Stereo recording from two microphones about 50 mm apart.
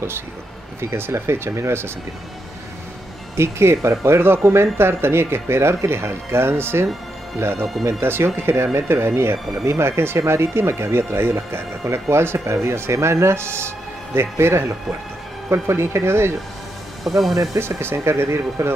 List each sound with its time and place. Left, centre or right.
0.7 s speech: right
3.3 s speech: right
15.5 s speech: right
17.6 s speech: right